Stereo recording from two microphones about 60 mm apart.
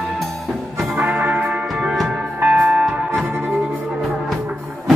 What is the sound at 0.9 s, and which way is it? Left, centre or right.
Music, right.